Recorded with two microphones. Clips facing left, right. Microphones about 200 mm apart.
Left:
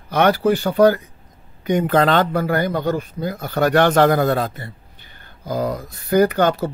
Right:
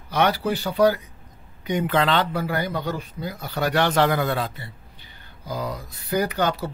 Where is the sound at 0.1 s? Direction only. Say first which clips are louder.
Left 6 dB; 50° left (ahead or behind).